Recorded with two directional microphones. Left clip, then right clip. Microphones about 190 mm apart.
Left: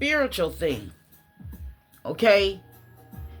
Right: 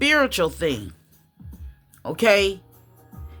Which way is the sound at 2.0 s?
20° right (ahead or behind).